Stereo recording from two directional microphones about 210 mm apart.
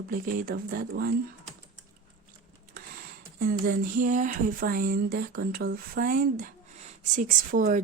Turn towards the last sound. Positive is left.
turn(degrees=-35)  # may be behind; listen again after turning